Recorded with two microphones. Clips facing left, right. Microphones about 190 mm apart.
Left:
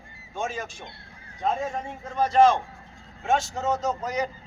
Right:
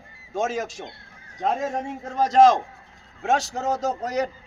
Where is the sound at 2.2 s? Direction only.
85° right.